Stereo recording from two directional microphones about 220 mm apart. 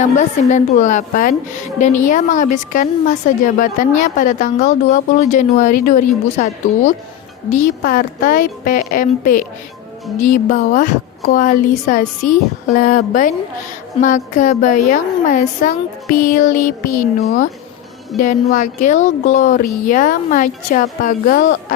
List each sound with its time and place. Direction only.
0.0 s a woman's voice: 35° left (ahead or behind)